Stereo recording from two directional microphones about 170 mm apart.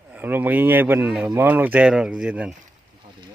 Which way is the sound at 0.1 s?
10° right (ahead or behind).